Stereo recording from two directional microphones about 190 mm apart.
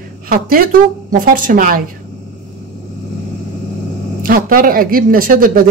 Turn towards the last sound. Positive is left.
turn(degrees=-50)  # may be behind; listen again after turning